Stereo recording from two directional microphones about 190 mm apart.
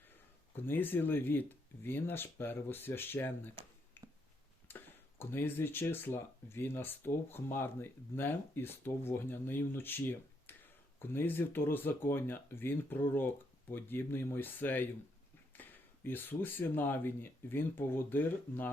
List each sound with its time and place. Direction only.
0.1 s speech: 10° left (ahead or behind)
4.0 s a sound: 10° left (ahead or behind)
4.7 s tick-tock: 10° left (ahead or behind)
5.2 s speech: 10° left (ahead or behind)